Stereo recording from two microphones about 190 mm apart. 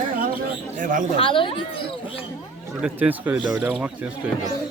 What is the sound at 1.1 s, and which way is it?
Speech, 30° left (ahead or behind).